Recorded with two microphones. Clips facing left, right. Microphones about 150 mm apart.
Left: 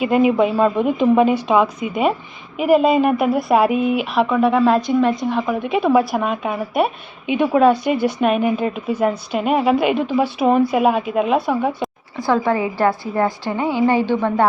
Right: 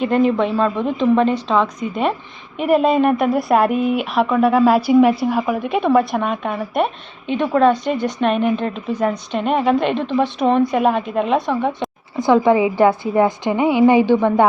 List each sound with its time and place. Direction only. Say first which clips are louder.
0.0 s a woman's voice: left 1 dB; 5° left (ahead or behind)
12.1 s a woman's voice: right 5 dB; 15° right (ahead or behind)